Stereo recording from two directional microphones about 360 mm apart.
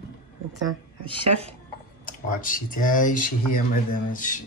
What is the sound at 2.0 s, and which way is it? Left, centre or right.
Speech, left.